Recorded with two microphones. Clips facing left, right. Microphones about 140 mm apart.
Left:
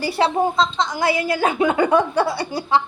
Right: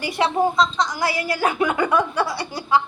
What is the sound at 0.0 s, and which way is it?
A woman's voice, 30° left (ahead or behind).